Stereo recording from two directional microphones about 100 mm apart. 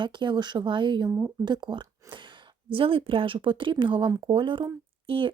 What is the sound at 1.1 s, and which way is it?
Speech, 30° right (ahead or behind).